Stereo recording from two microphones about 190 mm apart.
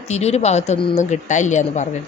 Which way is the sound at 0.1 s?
35° left (ahead or behind).